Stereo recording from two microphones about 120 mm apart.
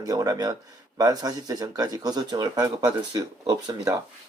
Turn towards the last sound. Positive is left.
turn(degrees=-35)  # may be behind; listen again after turning